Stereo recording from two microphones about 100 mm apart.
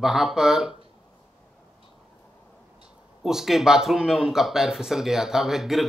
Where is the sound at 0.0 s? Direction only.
5° right (ahead or behind).